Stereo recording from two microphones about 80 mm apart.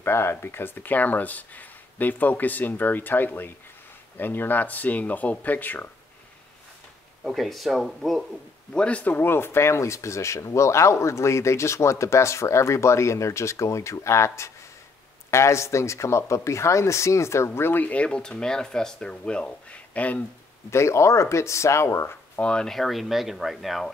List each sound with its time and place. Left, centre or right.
0.0 s speech: left
7.2 s speech: centre
8.7 s speech: centre; by 17.5 s left
17.5 s speech: left
20.7 s speech: left
22.3 s speech: centre